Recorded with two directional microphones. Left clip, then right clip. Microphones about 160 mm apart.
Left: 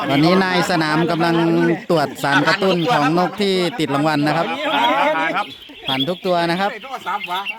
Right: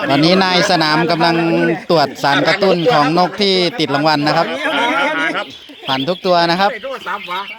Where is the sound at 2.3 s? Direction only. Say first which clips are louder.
Even; 45° left (ahead or behind).